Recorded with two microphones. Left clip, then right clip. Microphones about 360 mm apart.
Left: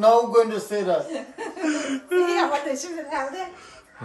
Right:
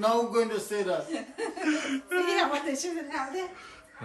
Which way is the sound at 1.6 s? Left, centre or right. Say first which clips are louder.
Left 5 dB; centre.